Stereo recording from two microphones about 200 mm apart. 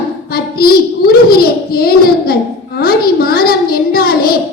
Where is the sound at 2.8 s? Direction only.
50° left (ahead or behind).